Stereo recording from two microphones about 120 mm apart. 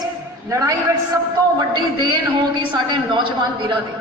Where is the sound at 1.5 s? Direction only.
40° right (ahead or behind).